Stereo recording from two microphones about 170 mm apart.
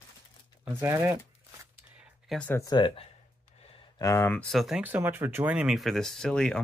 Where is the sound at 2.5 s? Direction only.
25° left (ahead or behind).